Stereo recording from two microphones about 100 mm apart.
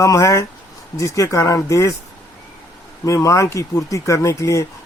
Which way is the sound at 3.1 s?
30° left (ahead or behind).